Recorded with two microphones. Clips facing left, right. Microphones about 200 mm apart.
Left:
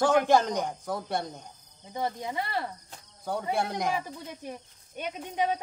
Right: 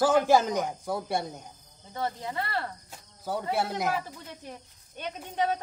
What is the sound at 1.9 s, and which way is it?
Speech, 15° left (ahead or behind).